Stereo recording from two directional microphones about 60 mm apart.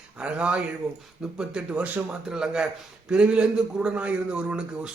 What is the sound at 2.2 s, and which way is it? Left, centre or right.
A man's voice, centre.